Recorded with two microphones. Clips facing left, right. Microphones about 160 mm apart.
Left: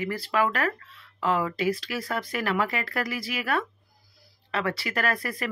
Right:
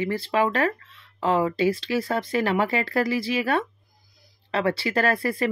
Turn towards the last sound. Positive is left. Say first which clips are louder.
# right 6 dB
turn(degrees=-30)  # may be behind; listen again after turning